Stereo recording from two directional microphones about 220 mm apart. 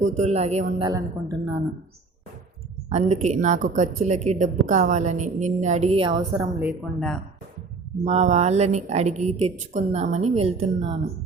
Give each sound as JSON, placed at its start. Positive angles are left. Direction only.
{"t": 0.0, "sound": "a woman's voice", "side_deg": -30}
{"t": 0.9, "sound": "a woman's voice", "side_deg": -15}
{"t": 2.9, "sound": "a woman's voice", "side_deg": -30}
{"t": 6.6, "sound": "speech", "side_deg": 0}
{"t": 8.0, "sound": "a woman's voice", "side_deg": -30}